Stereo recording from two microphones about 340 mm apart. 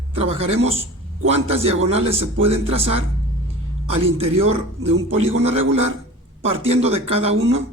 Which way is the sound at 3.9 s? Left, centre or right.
Right.